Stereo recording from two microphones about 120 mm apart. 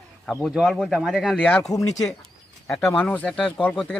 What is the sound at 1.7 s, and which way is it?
Speech, 30° left (ahead or behind).